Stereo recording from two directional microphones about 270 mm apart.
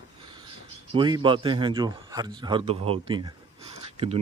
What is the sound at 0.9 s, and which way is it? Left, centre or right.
A man's voice, centre.